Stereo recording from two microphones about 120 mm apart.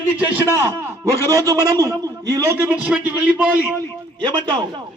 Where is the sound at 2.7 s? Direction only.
10° right (ahead or behind).